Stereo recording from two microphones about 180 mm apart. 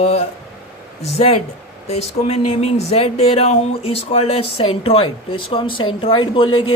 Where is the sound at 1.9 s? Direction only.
35° left (ahead or behind).